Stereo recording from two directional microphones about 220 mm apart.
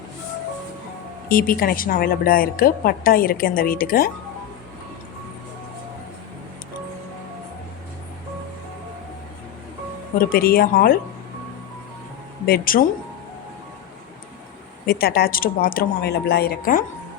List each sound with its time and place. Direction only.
1.3 s a woman's voice: 40° left (ahead or behind)
10.2 s a woman's voice: 40° left (ahead or behind)
12.5 s a woman's voice: 40° left (ahead or behind)
14.8 s speech: 45° left (ahead or behind)